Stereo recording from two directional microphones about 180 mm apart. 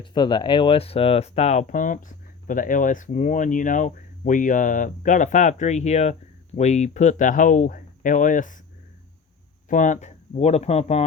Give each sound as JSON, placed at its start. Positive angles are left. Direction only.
{"t": 0.0, "sound": "speech", "side_deg": 25}
{"t": 9.6, "sound": "speech", "side_deg": 45}